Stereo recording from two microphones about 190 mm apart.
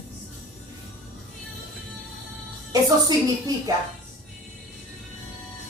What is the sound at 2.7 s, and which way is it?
A woman's voice, 20° right (ahead or behind).